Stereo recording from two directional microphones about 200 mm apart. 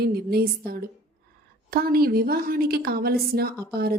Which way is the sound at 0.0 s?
50° right (ahead or behind).